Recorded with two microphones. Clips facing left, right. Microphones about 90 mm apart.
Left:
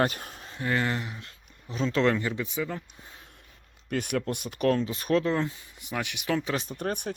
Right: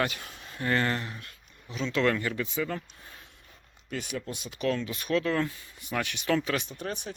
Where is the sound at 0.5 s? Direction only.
10° left (ahead or behind).